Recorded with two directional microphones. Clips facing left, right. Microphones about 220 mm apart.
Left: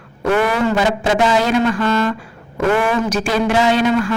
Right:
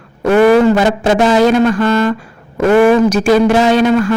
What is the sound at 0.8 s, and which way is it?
Speech, 45° right (ahead or behind).